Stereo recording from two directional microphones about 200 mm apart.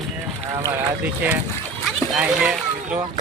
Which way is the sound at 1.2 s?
10° right (ahead or behind).